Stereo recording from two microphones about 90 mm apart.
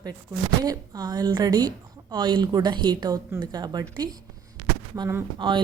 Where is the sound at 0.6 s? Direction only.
45° right (ahead or behind).